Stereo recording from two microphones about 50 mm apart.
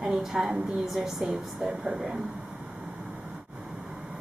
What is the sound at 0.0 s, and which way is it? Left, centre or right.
Speech, centre.